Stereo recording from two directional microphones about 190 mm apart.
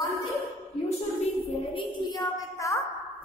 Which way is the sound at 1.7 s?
20° left (ahead or behind).